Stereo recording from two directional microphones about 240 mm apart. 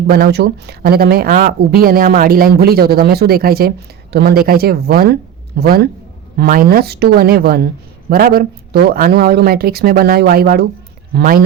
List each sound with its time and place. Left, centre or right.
0.1 s speech: right